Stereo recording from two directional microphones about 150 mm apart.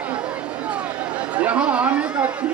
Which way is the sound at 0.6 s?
10° right (ahead or behind).